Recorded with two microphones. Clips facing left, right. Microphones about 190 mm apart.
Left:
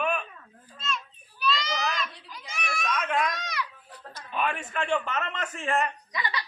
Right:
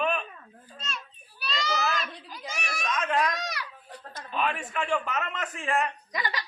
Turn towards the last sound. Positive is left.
turn(degrees=-45)  # may be behind; listen again after turning